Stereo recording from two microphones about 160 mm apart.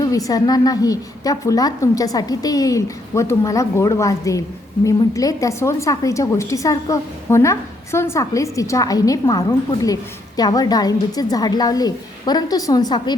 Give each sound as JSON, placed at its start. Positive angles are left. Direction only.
{"t": 0.0, "sound": "a woman's voice", "side_deg": 20}